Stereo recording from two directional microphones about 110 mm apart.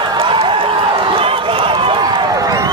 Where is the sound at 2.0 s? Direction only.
35° right (ahead or behind).